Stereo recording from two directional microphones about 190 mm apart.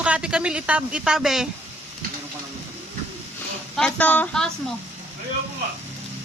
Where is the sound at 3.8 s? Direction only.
5° left (ahead or behind).